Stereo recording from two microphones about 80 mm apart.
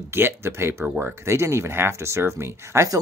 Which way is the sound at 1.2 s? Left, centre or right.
Right.